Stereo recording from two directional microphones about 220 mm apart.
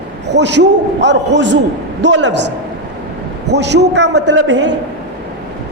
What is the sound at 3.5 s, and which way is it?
A man's voice, 50° right (ahead or behind).